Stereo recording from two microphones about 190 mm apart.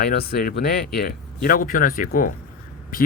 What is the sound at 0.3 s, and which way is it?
Speech, 55° left (ahead or behind).